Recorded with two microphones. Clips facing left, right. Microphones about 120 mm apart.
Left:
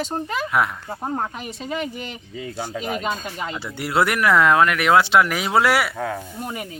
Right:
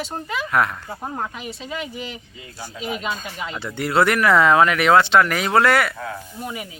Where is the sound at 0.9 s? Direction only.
20° left (ahead or behind).